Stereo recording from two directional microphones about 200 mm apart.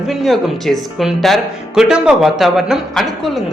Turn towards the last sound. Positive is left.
turn(degrees=0)  # may be behind; listen again after turning